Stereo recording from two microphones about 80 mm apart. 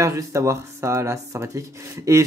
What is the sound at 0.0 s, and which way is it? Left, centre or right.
Speech, right.